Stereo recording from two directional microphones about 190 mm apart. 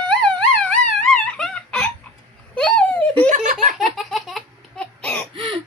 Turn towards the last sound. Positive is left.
turn(degrees=-25)  # may be behind; listen again after turning